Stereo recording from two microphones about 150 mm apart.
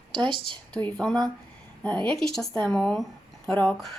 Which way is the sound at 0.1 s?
30° right (ahead or behind).